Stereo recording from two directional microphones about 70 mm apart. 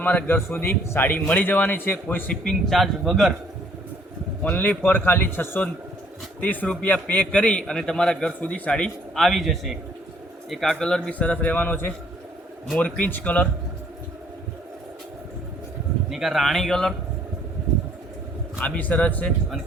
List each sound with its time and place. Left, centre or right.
0.0 s a man's voice: left
2.3 s a man's voice: centre
4.4 s a man's voice: left
9.1 s a man's voice: centre; by 13.5 s left
16.0 s a man's voice: centre
18.6 s a man's voice: left